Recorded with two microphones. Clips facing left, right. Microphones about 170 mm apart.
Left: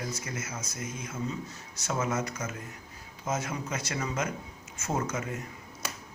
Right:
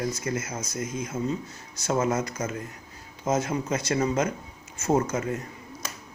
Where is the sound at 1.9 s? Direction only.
30° right (ahead or behind).